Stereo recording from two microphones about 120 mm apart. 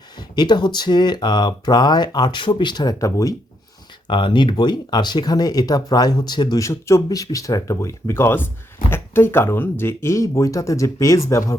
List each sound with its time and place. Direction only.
0.2 s speech: 35° left (ahead or behind)
4.0 s speech: 40° left (ahead or behind)
6.6 s speech: 25° left (ahead or behind)